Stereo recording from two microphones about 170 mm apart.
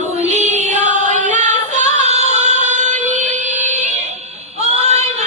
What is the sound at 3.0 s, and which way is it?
Music, 45° right (ahead or behind).